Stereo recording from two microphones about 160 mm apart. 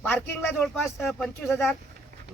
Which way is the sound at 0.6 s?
Centre (ahead or behind).